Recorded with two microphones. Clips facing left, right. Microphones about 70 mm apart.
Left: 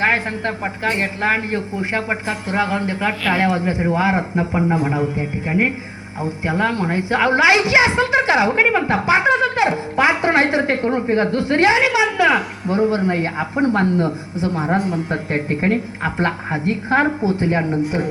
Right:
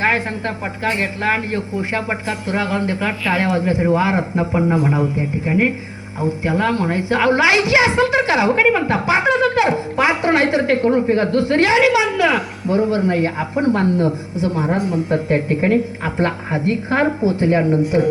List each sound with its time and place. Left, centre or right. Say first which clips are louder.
0.0 s a woman's voice: even; centre